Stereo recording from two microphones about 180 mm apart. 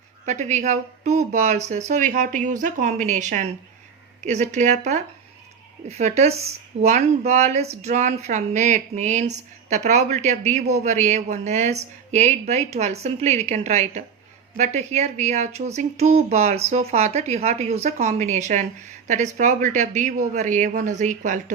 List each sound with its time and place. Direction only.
0.3 s a woman's voice: 40° right (ahead or behind)